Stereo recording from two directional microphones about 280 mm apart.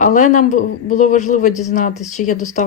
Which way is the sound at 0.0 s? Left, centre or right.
Left.